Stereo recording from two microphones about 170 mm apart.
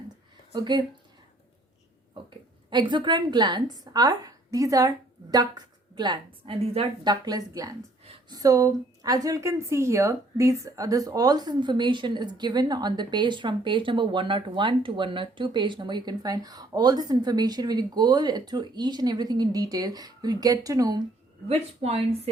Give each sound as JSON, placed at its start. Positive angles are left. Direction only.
{"t": 0.5, "sound": "a woman's voice", "side_deg": -25}
{"t": 2.2, "sound": "a sound", "side_deg": -30}
{"t": 2.6, "sound": "a woman's voice", "side_deg": -25}
{"t": 21.4, "sound": "speech", "side_deg": -35}